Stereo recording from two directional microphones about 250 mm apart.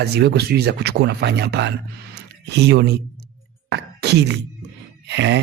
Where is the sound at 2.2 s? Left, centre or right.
Right.